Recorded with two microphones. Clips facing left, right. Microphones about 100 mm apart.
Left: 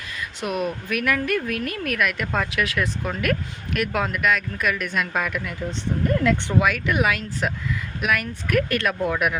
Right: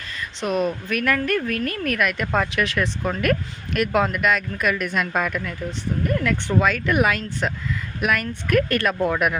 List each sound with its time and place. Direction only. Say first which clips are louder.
0.4 s speech: right 3 dB; 5° left (ahead or behind)
6.1 s speech: left 2 dB; 20° left (ahead or behind)
6.6 s speech: right 5 dB; 10° left (ahead or behind)